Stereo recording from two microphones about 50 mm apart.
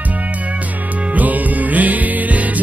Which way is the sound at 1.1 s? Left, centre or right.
Right.